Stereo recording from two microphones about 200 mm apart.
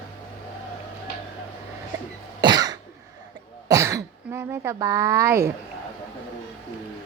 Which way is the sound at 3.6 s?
15° right (ahead or behind).